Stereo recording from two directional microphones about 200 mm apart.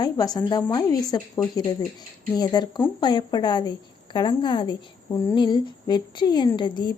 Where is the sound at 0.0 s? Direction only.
20° left (ahead or behind).